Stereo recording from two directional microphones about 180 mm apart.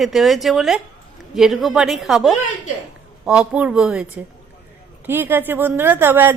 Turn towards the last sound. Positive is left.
turn(degrees=-10)  # may be behind; listen again after turning